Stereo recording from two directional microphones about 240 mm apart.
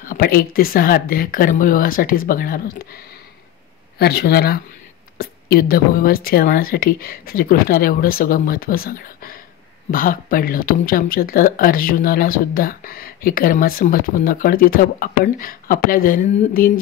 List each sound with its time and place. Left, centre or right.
0.0 s speech: left
4.0 s speech: left